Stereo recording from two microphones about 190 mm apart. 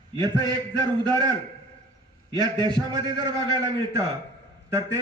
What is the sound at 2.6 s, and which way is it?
A man's voice, 20° right (ahead or behind).